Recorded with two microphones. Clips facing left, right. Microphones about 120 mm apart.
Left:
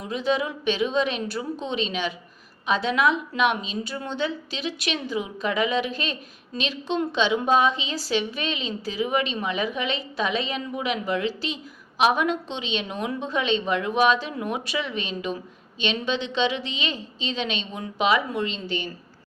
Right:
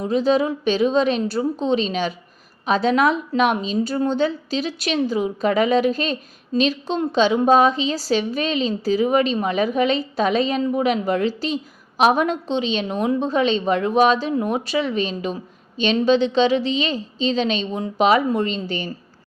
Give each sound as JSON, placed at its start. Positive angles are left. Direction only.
{"t": 0.0, "sound": "a woman's voice", "side_deg": -35}